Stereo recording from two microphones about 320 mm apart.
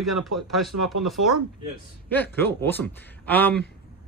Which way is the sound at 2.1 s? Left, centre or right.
Centre.